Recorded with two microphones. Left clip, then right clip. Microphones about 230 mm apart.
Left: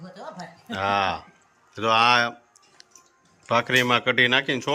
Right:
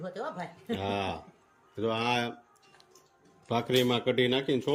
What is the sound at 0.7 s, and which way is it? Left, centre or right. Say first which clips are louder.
Speech: left 10 dB; centre.